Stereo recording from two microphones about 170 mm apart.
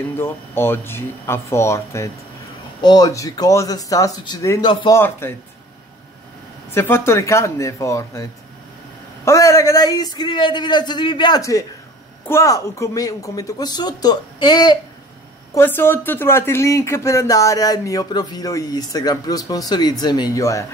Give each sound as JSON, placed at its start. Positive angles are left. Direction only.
{"t": 0.2, "sound": "speech", "side_deg": 15}
{"t": 6.7, "sound": "speech", "side_deg": 15}
{"t": 15.5, "sound": "speech", "side_deg": 15}